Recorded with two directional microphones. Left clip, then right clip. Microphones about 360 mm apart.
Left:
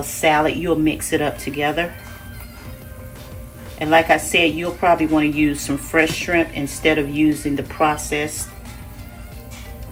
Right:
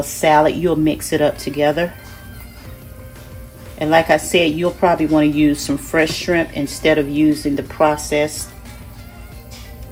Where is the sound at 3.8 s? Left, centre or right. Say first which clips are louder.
Right 1 dB; right.